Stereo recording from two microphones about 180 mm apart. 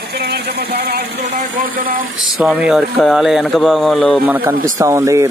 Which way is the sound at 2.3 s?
5° right (ahead or behind).